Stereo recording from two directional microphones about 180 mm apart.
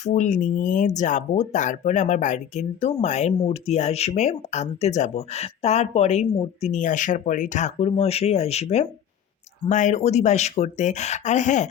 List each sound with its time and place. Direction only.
0.0 s speech: 40° left (ahead or behind)